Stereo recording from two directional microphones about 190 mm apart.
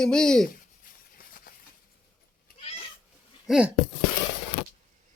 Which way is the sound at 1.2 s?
50° left (ahead or behind).